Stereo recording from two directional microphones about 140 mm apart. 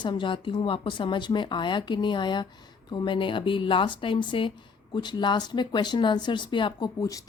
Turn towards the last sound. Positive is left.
turn(degrees=25)  # may be behind; listen again after turning